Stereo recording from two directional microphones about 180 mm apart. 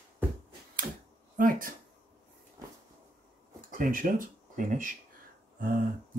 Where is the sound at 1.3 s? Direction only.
50° right (ahead or behind).